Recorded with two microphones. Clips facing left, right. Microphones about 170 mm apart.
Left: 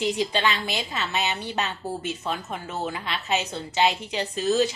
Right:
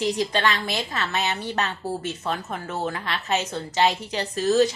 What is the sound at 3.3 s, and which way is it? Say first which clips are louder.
A woman's voice: right 1 dB; 35° right (ahead or behind).